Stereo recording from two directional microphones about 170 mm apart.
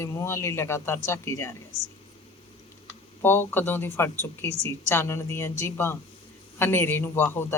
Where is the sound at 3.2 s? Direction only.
10° left (ahead or behind).